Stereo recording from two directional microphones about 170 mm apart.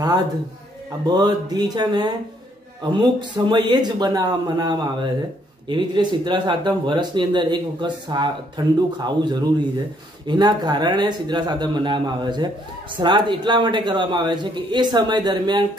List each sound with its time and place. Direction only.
1.0 s speech: 25° right (ahead or behind)